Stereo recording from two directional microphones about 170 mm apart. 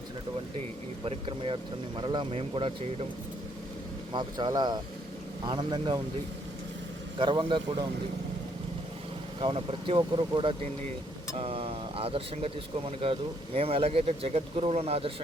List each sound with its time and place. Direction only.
1.0 s speech: 30° right (ahead or behind)
4.1 s speech: 25° right (ahead or behind)
7.2 s speech: 30° right (ahead or behind)
9.4 s speech: 30° right (ahead or behind)